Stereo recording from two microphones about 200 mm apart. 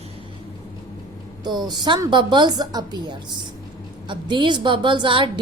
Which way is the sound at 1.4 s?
20° right (ahead or behind).